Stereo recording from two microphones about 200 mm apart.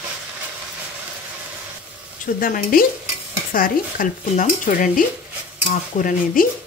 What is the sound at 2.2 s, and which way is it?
Speech, 45° left (ahead or behind).